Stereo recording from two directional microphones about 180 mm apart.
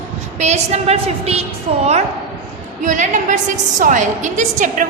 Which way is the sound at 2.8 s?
45° right (ahead or behind).